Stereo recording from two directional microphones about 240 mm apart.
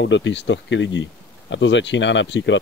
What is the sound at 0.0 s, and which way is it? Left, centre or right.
Speech, left.